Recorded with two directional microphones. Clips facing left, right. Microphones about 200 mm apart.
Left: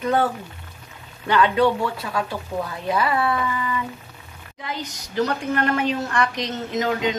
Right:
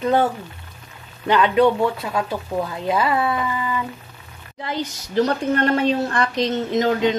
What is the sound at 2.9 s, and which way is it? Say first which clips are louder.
Speech: right 1 dB; 20° right (ahead or behind).